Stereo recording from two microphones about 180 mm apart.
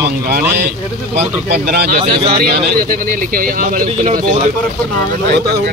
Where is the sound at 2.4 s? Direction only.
50° right (ahead or behind).